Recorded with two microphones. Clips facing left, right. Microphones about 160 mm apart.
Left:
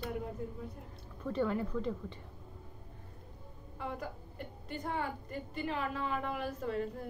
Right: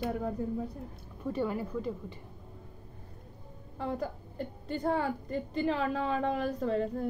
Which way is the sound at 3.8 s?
35° right (ahead or behind).